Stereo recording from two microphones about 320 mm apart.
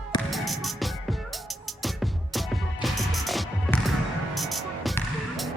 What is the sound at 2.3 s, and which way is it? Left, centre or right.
Music, centre.